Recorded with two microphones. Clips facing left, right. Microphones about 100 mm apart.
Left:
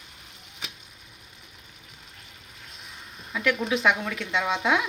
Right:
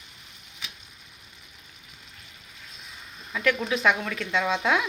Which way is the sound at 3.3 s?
10° left (ahead or behind).